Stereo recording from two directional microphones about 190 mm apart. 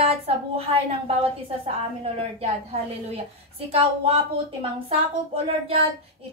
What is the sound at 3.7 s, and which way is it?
Speech, 30° right (ahead or behind).